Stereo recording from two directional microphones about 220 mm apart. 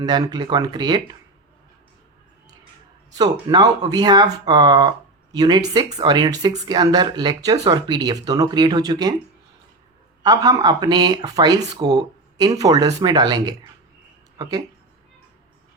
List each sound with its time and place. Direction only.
0.0 s speech: 20° right (ahead or behind)
3.2 s speech: 20° right (ahead or behind)
10.2 s speech: 20° right (ahead or behind)